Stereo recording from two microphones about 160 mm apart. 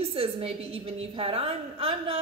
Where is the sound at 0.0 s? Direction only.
35° right (ahead or behind).